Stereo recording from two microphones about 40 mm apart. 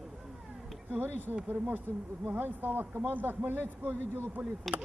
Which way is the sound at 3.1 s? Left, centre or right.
Right.